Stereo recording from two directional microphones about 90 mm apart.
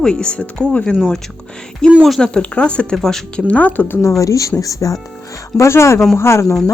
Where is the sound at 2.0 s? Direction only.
5° left (ahead or behind).